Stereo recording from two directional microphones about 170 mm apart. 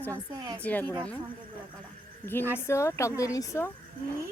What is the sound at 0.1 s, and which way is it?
Speech, 20° right (ahead or behind).